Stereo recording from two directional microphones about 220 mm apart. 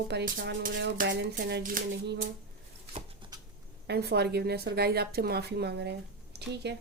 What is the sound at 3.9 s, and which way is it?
Speech, 50° right (ahead or behind).